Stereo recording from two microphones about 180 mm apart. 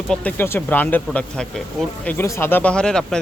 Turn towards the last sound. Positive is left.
turn(degrees=5)  # may be behind; listen again after turning